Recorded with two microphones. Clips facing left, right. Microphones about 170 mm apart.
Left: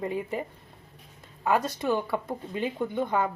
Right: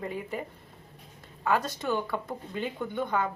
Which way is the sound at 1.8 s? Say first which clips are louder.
Left 3 dB; 10° left (ahead or behind).